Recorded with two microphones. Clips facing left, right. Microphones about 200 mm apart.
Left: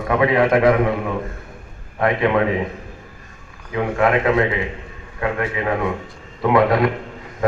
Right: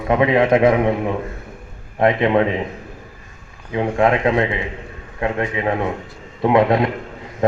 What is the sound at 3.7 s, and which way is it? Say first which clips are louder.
A man's voice: right 1 dB; 25° right (ahead or behind).